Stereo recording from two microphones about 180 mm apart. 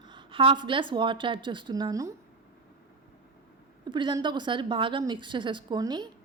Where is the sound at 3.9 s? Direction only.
25° right (ahead or behind).